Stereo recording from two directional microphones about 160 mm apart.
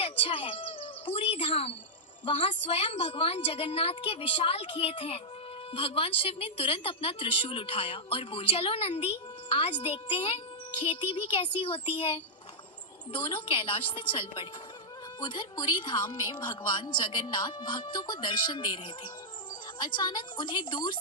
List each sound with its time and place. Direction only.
0.0 s bird: 35° left (ahead or behind)
2.2 s a woman's voice: 35° left (ahead or behind)